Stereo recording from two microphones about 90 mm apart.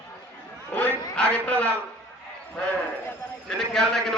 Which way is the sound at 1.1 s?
15° left (ahead or behind).